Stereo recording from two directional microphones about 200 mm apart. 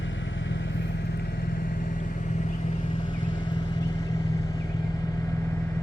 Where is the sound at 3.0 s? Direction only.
25° left (ahead or behind).